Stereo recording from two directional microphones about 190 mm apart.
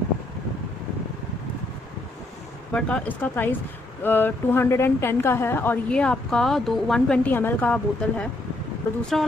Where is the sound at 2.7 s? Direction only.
5° left (ahead or behind).